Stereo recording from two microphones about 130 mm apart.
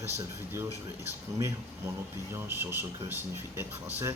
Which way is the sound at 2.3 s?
20° right (ahead or behind).